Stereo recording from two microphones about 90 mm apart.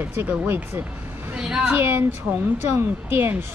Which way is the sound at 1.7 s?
25° right (ahead or behind).